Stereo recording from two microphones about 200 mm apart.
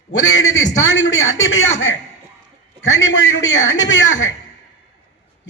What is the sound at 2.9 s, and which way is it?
Speech, 70° left (ahead or behind).